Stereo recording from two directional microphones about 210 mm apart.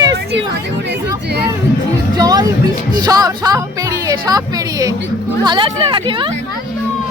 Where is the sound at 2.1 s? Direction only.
20° right (ahead or behind).